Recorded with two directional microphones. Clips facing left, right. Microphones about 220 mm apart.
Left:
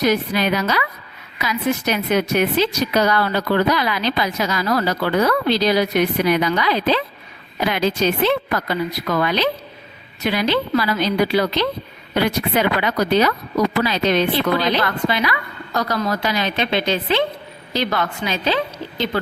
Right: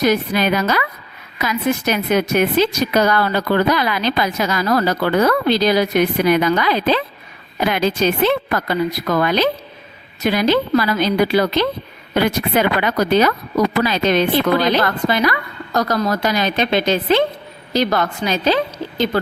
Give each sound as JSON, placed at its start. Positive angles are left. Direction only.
{"t": 0.0, "sound": "a woman's voice", "side_deg": -50}